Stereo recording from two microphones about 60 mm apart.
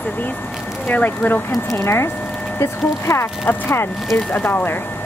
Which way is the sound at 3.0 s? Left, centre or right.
Left.